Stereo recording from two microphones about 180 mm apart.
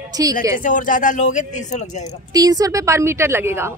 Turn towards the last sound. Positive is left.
turn(degrees=-15)  # may be behind; listen again after turning